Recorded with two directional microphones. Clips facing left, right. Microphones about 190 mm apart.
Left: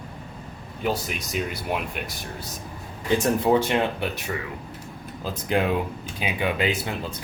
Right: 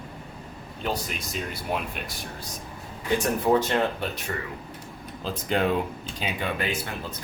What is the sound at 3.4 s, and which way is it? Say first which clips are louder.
Speech: left 1 dB; 15° left (ahead or behind).